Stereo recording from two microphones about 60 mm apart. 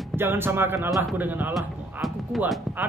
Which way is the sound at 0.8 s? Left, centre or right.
Right.